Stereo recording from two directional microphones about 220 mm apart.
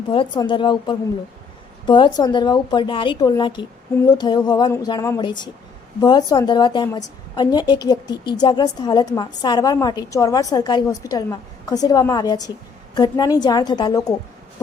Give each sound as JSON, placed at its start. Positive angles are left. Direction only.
{"t": 0.1, "sound": "a woman's voice", "side_deg": 20}